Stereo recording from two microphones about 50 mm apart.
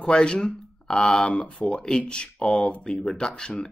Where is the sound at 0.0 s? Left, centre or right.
Centre.